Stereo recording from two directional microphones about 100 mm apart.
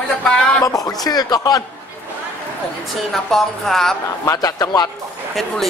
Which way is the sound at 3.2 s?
5° left (ahead or behind).